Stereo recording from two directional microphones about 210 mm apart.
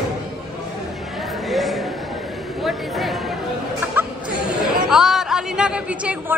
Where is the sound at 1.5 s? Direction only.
Centre (ahead or behind).